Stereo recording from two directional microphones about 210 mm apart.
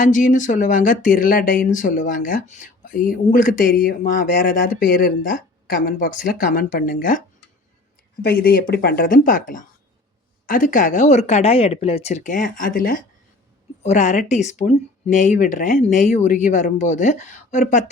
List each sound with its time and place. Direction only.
0.0 s speech: 40° left (ahead or behind)
8.2 s speech: 45° left (ahead or behind)